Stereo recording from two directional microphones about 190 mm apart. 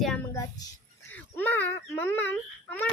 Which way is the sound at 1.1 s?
10° left (ahead or behind).